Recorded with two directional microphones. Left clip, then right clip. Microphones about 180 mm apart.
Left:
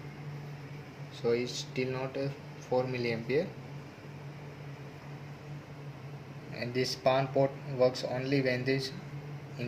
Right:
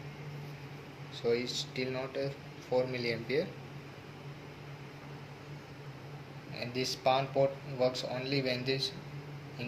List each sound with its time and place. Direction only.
1.2 s speech: 45° left (ahead or behind)
6.6 s speech: 40° left (ahead or behind)